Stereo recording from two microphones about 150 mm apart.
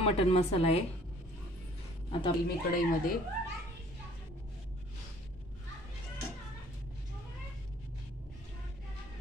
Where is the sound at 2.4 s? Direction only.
75° left (ahead or behind).